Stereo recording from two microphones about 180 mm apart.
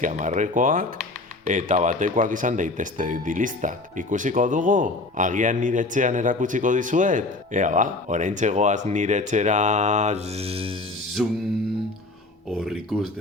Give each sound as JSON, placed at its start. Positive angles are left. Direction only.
{"t": 0.0, "sound": "speech", "side_deg": -45}
{"t": 11.2, "sound": "speech", "side_deg": 0}
{"t": 12.5, "sound": "speech", "side_deg": 0}